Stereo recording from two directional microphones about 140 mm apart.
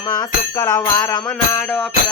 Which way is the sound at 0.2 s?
25° left (ahead or behind).